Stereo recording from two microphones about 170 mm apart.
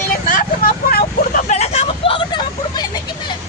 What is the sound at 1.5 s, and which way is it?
Vehicle, 40° left (ahead or behind).